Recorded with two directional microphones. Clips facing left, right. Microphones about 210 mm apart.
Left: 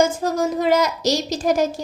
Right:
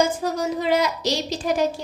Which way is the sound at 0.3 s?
45° left (ahead or behind).